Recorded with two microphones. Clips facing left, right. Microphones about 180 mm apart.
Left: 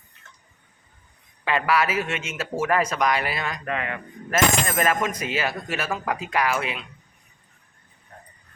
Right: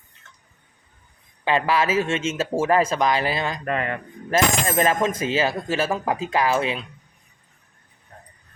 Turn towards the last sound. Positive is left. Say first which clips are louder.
# right 3 dB
turn(degrees=-30)  # may be behind; listen again after turning